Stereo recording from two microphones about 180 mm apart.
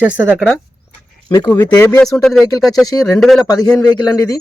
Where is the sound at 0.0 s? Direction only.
5° right (ahead or behind).